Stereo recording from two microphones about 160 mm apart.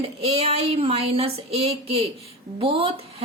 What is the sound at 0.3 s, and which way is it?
A woman's voice, 40° right (ahead or behind).